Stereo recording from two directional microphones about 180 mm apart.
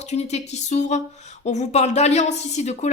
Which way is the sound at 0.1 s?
40° left (ahead or behind).